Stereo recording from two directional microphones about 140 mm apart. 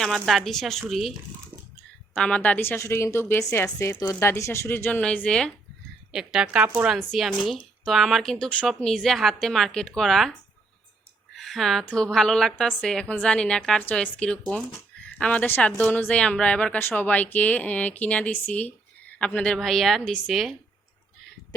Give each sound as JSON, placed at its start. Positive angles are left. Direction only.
{"t": 0.0, "sound": "a woman's voice", "side_deg": 0}
{"t": 2.1, "sound": "a woman's voice", "side_deg": 5}
{"t": 11.3, "sound": "a woman's voice", "side_deg": 0}